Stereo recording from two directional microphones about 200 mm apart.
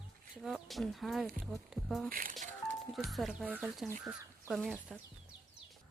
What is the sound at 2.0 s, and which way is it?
Speech, 45° right (ahead or behind).